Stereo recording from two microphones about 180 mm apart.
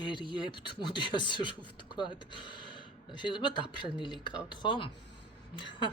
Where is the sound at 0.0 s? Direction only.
25° left (ahead or behind).